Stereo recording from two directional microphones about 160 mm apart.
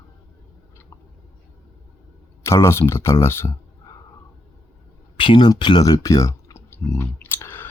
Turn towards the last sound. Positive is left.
turn(degrees=15)  # may be behind; listen again after turning